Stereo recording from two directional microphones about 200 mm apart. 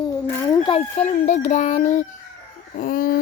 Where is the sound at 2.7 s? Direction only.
45° left (ahead or behind).